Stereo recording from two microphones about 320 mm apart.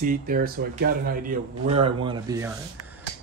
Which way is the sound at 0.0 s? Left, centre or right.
Right.